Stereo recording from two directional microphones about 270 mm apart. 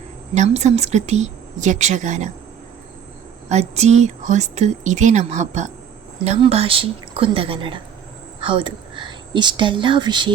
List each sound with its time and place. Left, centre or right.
0.3 s speech: right
3.5 s speech: right